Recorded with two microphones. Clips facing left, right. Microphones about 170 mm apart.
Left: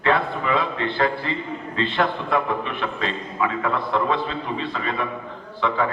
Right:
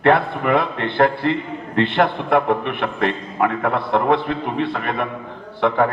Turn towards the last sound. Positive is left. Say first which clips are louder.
# right 5 dB
turn(degrees=-55)  # may be behind; listen again after turning